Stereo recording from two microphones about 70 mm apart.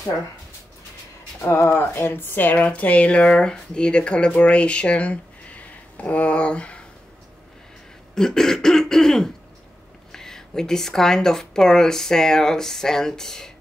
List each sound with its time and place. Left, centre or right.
1.7 s a woman's voice: left
2.5 s speech: centre
8.1 s speech: centre